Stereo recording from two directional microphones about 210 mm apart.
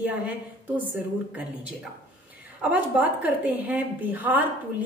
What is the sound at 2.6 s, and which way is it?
A woman's voice, 5° right (ahead or behind).